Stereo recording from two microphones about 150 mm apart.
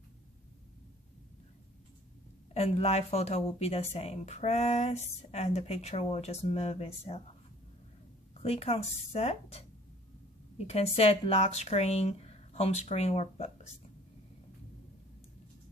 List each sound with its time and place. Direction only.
2.5 s speech: 40° left (ahead or behind)
8.4 s speech: 40° left (ahead or behind)
10.7 s speech: 45° left (ahead or behind)